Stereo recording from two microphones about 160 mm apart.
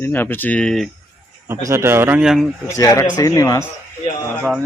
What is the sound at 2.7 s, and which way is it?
Speech, 20° left (ahead or behind).